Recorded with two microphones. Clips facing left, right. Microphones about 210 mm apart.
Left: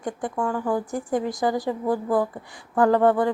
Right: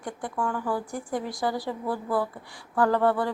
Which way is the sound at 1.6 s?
15° left (ahead or behind).